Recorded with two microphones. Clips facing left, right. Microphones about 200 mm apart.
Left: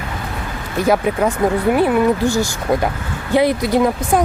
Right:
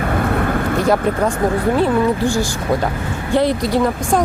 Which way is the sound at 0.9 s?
5° left (ahead or behind).